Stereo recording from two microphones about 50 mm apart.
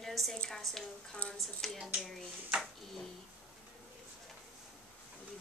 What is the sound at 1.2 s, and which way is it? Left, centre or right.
Speech, left.